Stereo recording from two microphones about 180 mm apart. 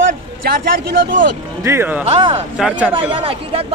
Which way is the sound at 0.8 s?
55° right (ahead or behind).